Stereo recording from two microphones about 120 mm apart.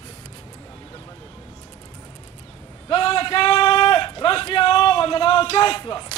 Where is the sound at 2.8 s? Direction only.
50° left (ahead or behind).